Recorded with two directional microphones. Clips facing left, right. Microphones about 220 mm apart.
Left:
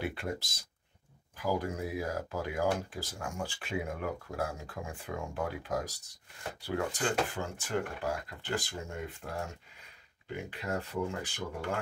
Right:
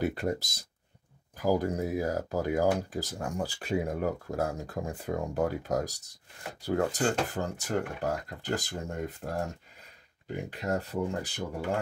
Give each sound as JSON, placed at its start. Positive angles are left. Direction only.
{"t": 0.0, "sound": "speech", "side_deg": -40}